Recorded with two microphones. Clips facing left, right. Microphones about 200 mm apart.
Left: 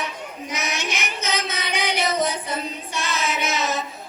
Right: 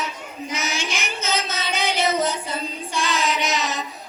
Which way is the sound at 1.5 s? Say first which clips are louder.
Right 1 dB; 25° right (ahead or behind).